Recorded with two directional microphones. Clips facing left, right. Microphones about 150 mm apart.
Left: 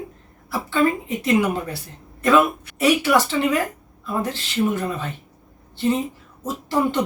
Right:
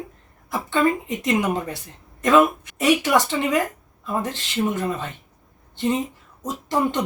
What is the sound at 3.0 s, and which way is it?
Speech, 15° right (ahead or behind).